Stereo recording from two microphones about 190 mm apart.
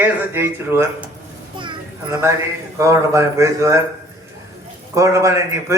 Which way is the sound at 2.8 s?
15° right (ahead or behind).